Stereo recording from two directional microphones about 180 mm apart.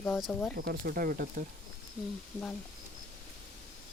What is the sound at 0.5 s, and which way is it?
Speech, 60° right (ahead or behind).